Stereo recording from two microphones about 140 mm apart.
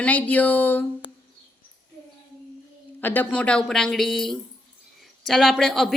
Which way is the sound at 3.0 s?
15° left (ahead or behind).